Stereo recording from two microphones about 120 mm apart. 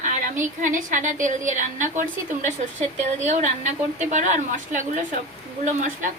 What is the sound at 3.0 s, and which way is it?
A woman's voice, 75° right (ahead or behind).